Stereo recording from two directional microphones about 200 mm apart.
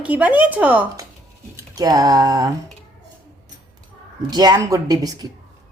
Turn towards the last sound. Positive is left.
turn(degrees=-15)  # may be behind; listen again after turning